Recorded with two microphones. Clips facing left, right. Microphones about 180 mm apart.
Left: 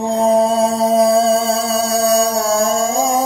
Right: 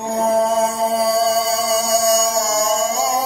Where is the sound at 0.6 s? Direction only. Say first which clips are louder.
Left 4 dB; 40° left (ahead or behind).